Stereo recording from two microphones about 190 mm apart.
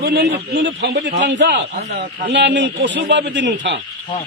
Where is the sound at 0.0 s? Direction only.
60° right (ahead or behind).